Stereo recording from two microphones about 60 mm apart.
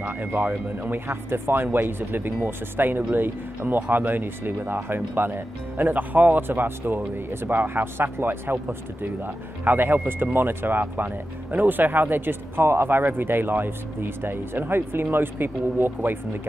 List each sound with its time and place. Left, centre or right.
0.0 s speech: right